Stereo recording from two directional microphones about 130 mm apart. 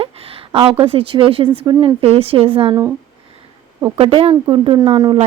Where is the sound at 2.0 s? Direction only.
50° right (ahead or behind).